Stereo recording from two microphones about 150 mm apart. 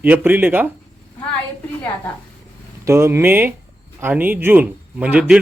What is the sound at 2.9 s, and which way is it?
A man's voice, 20° right (ahead or behind).